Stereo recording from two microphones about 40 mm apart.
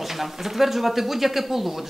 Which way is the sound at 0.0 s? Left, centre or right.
Centre.